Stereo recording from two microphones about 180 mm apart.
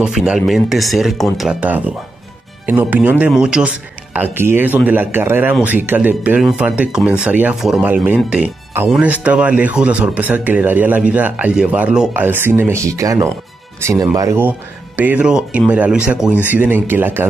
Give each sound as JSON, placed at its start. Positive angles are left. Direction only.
{"t": 0.0, "sound": "speech", "side_deg": -5}